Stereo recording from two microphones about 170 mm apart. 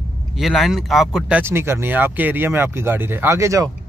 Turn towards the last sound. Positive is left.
turn(degrees=-15)  # may be behind; listen again after turning